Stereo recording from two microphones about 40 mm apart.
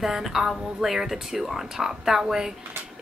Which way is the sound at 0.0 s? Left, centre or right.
Centre.